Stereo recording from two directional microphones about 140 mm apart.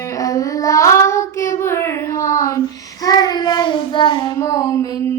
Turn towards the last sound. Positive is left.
turn(degrees=25)  # may be behind; listen again after turning